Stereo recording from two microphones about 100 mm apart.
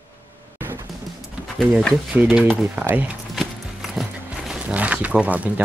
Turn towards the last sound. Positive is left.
turn(degrees=-15)  # may be behind; listen again after turning